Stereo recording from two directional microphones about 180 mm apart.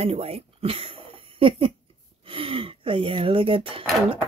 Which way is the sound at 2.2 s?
30° right (ahead or behind).